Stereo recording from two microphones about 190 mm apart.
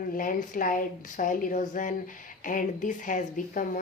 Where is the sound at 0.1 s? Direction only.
45° left (ahead or behind).